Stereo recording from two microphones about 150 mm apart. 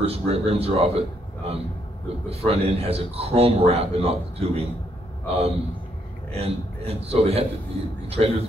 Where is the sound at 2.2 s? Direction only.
40° right (ahead or behind).